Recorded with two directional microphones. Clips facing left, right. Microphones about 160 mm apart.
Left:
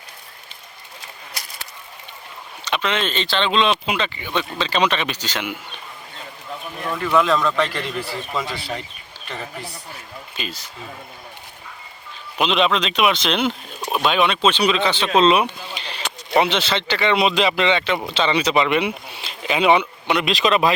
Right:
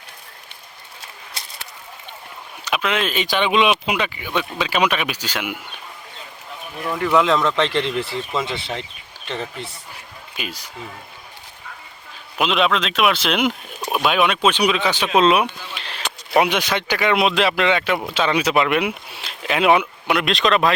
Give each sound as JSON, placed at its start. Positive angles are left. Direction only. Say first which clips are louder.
{"t": 1.4, "sound": "a sound", "louder": "even", "side_deg": -25}
{"t": 2.6, "sound": "speech", "louder": "right 1 dB", "side_deg": -5}
{"t": 6.8, "sound": "speech", "louder": "right 1 dB", "side_deg": -15}
{"t": 10.3, "sound": "speech", "louder": "right 1 dB", "side_deg": -10}
{"t": 12.4, "sound": "speech", "louder": "even", "side_deg": 0}